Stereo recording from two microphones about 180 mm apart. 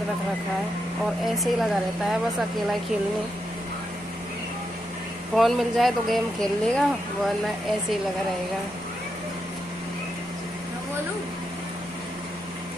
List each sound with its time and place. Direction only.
1.2 s speech: centre (ahead or behind)
5.3 s speech: centre (ahead or behind)